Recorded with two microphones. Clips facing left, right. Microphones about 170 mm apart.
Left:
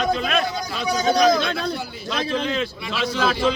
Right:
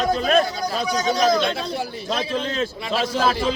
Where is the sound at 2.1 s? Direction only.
40° right (ahead or behind).